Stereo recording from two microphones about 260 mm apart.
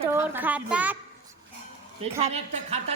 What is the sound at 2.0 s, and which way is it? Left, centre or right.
Speech, right.